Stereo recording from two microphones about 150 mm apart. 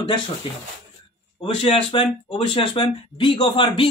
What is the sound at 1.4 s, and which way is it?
Speech, 40° left (ahead or behind).